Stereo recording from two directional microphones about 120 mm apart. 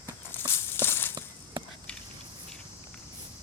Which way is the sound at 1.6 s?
40° right (ahead or behind).